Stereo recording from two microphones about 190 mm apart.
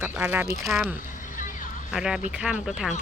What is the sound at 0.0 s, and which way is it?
Speech, 10° right (ahead or behind).